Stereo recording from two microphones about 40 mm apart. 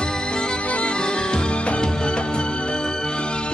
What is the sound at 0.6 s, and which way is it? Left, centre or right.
Music, left.